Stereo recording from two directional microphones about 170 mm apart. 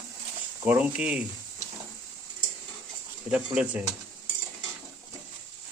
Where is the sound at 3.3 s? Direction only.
5° right (ahead or behind).